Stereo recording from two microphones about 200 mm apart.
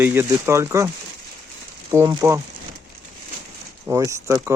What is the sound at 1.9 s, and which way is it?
Speech, 15° right (ahead or behind).